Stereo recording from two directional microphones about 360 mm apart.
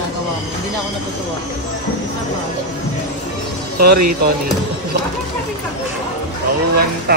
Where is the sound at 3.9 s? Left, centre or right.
Right.